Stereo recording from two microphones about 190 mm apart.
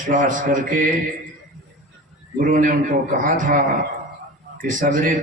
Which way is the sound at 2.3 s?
45° right (ahead or behind).